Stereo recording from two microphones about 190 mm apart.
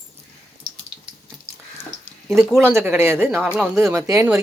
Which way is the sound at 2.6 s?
10° right (ahead or behind).